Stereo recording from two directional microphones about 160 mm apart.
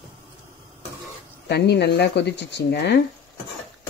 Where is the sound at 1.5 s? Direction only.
90° left.